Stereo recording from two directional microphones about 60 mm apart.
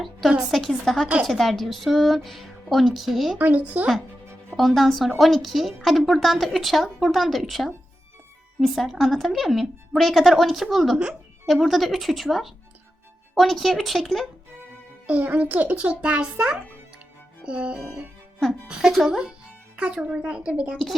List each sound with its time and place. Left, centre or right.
0.5 s a woman's voice: centre
3.3 s a child's voice: right
4.5 s a woman's voice: centre
15.2 s a child's voice: right
17.4 s music: centre
18.8 s speech: centre
19.7 s a child's voice: centre